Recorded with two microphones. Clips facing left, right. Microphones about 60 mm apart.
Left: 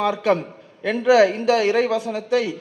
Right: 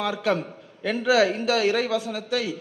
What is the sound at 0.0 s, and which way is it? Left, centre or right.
A man's voice, left.